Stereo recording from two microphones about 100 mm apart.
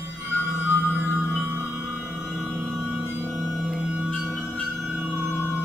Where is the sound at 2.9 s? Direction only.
20° right (ahead or behind).